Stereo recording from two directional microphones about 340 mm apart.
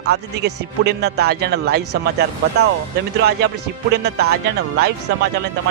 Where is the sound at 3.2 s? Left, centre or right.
Right.